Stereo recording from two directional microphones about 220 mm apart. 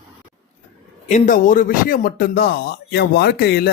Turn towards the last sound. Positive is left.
turn(degrees=45)  # may be behind; listen again after turning